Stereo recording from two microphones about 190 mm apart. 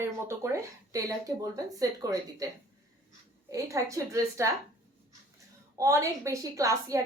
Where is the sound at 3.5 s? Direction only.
15° right (ahead or behind).